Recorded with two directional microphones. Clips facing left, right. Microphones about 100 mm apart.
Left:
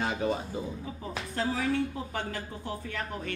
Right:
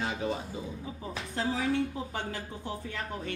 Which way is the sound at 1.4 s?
20° right (ahead or behind).